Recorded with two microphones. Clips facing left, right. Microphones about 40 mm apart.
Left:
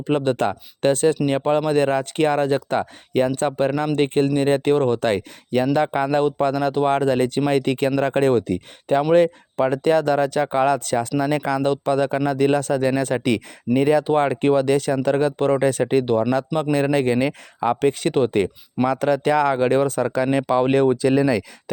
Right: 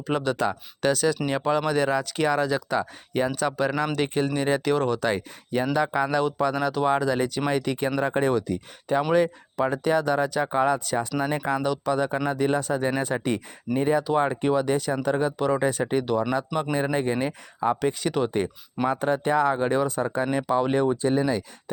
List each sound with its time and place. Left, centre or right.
0.1 s speech: left
4.9 s speech: left
11.2 s speech: left
11.6 s speech: left
13.1 s speech: left
13.7 s speech: left
18.3 s speech: left
20.9 s speech: left